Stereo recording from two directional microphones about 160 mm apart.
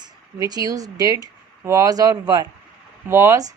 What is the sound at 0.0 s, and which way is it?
Speech, 25° right (ahead or behind).